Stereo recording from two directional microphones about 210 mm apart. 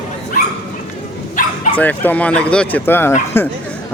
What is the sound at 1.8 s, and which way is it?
Speech, 10° left (ahead or behind).